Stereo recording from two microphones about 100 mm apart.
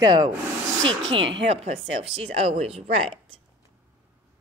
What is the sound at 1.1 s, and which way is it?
A woman's voice, 75° right (ahead or behind).